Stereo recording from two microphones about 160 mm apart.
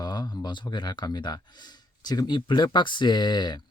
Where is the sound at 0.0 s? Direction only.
25° left (ahead or behind).